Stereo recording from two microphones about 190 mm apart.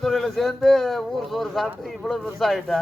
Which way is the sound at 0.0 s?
Centre (ahead or behind).